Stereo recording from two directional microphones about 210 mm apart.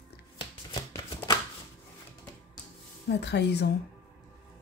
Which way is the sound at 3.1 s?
55° left (ahead or behind).